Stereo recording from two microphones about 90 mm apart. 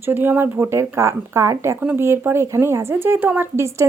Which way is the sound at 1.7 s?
20° right (ahead or behind).